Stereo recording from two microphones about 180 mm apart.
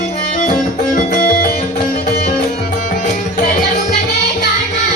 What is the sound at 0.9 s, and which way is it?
Music, 50° left (ahead or behind).